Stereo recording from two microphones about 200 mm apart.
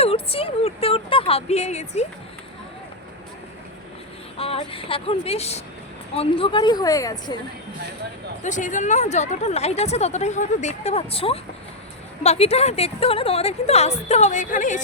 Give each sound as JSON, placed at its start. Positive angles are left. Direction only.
{"t": 0.0, "sound": "a sound", "side_deg": 30}
{"t": 4.4, "sound": "speech", "side_deg": 30}
{"t": 8.4, "sound": "speech", "side_deg": 40}